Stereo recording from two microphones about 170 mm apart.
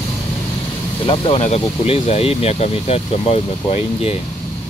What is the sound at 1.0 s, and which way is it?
Speech, 30° left (ahead or behind).